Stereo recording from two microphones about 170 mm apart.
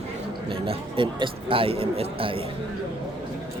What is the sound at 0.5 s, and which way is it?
A man's voice, 30° right (ahead or behind).